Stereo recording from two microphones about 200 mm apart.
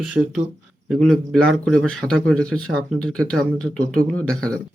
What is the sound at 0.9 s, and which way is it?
Speech, centre (ahead or behind).